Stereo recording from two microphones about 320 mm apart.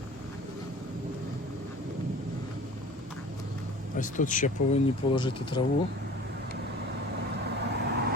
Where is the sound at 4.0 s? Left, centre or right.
Left.